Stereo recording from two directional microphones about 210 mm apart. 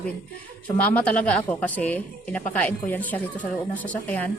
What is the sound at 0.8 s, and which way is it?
A woman's voice, 5° left (ahead or behind).